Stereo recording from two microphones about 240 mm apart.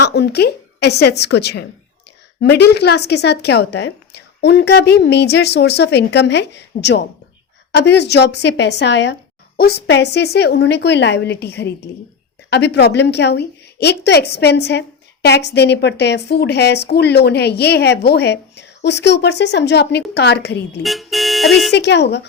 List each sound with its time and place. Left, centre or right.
0.0 s a woman's voice: left
20.8 s speech: centre
21.7 s a woman's voice: left